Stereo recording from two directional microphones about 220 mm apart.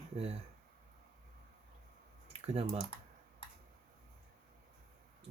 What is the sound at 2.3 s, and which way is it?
Speech, 25° right (ahead or behind).